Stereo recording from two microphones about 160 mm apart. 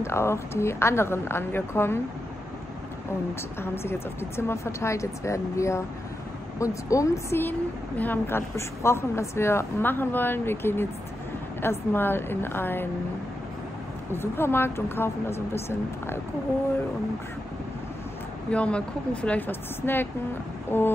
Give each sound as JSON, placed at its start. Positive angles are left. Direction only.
{"t": 0.0, "sound": "a woman's voice", "side_deg": 15}
{"t": 3.6, "sound": "a woman's voice", "side_deg": 15}
{"t": 14.1, "sound": "a woman's voice", "side_deg": 15}
{"t": 18.5, "sound": "a woman's voice", "side_deg": 5}